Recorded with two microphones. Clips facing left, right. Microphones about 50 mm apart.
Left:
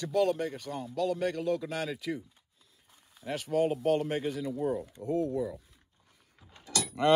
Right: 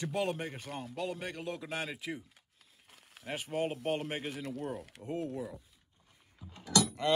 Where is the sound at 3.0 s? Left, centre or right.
Right.